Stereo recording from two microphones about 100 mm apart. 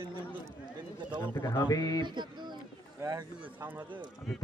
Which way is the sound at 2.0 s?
50° right (ahead or behind).